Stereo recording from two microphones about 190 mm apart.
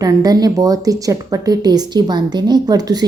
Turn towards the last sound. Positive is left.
turn(degrees=-20)  # may be behind; listen again after turning